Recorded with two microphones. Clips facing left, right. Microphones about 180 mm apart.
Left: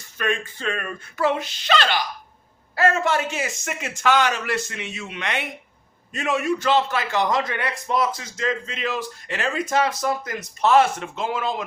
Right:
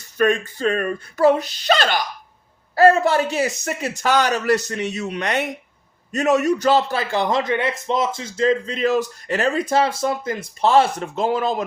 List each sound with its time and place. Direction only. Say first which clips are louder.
0.0 s a man's voice: right 7 dB; 40° right (ahead or behind)